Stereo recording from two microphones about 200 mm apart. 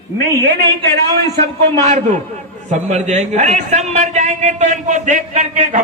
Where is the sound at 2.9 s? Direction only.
35° right (ahead or behind).